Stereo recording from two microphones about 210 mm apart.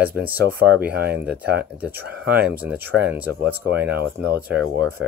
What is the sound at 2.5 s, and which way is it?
Speech, 10° right (ahead or behind).